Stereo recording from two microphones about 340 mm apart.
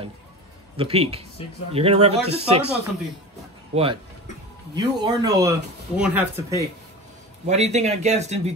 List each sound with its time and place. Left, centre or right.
0.7 s speech: centre
3.7 s speech: centre
7.4 s speech: centre